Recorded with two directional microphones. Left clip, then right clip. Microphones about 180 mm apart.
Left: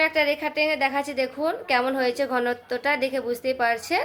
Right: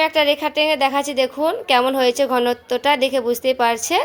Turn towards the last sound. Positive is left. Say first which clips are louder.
# right 5 dB
turn(degrees=-45)  # may be behind; listen again after turning